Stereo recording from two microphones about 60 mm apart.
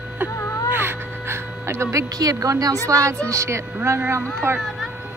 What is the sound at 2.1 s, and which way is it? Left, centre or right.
Speech, right.